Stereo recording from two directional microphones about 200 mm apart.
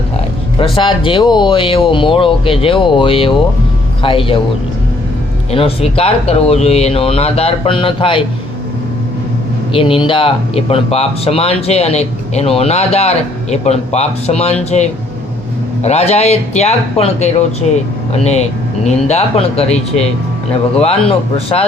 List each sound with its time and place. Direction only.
0.6 s speech: 25° left (ahead or behind)
5.5 s speech: 30° left (ahead or behind)
9.7 s speech: 25° left (ahead or behind)